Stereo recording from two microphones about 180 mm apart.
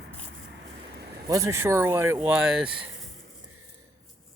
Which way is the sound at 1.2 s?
20° right (ahead or behind).